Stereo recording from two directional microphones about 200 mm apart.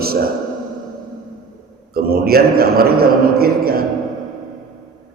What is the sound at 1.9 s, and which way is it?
A man's voice, 50° right (ahead or behind).